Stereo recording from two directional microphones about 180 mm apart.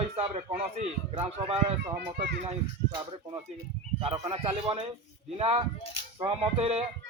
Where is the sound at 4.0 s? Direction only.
30° right (ahead or behind).